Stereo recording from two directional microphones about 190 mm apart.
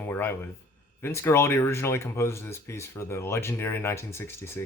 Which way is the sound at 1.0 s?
15° left (ahead or behind).